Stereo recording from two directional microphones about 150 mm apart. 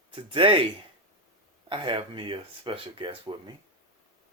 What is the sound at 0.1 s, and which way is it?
Speech, 35° right (ahead or behind).